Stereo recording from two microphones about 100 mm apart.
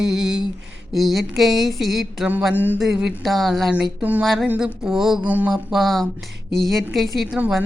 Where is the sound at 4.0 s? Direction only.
15° right (ahead or behind).